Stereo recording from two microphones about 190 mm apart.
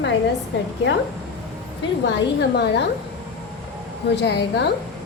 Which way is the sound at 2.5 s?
60° left (ahead or behind).